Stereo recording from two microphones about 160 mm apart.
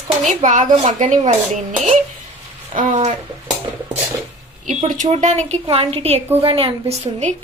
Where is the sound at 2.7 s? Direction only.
55° right (ahead or behind).